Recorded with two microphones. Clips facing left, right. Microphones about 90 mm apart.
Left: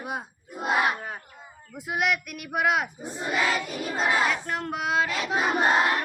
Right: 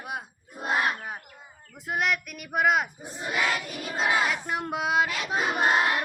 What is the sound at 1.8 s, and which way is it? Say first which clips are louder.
Choir: left 1 dB; 5° left (ahead or behind).